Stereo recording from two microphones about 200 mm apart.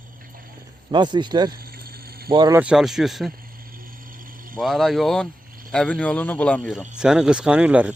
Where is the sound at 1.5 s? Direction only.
50° right (ahead or behind).